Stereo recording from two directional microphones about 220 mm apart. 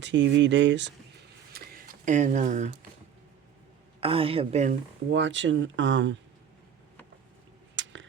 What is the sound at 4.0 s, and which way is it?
Speech, 25° right (ahead or behind).